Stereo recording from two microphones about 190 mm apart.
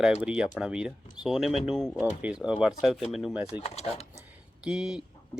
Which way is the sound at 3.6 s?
35° left (ahead or behind).